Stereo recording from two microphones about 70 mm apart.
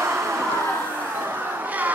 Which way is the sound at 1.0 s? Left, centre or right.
Right.